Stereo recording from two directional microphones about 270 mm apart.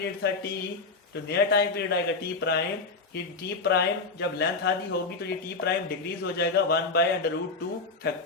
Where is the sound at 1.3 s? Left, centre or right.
Left.